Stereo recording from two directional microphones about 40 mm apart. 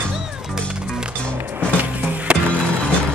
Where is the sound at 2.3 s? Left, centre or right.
Right.